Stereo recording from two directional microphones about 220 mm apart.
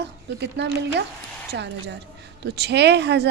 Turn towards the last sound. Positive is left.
turn(degrees=-50)  # may be behind; listen again after turning